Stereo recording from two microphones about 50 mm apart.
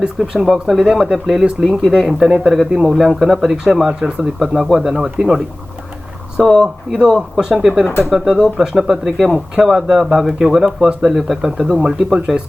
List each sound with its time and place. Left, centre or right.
0.2 s speech: centre
6.4 s speech: centre
9.1 s speech: centre
9.6 s speech: centre